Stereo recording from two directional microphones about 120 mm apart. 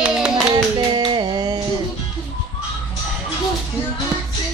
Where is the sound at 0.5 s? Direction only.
40° right (ahead or behind).